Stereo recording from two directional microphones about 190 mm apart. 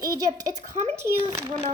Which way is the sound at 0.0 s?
20° right (ahead or behind).